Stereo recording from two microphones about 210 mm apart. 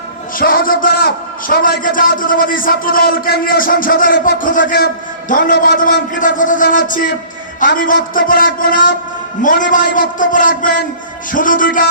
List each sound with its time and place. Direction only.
0.3 s a man's voice: 40° left (ahead or behind)